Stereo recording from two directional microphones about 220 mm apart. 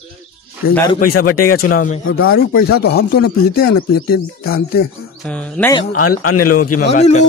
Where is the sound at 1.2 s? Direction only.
90° left.